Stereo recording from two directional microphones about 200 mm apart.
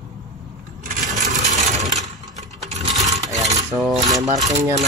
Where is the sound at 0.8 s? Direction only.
35° right (ahead or behind).